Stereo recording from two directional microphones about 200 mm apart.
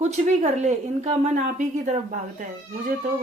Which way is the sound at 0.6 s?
35° right (ahead or behind).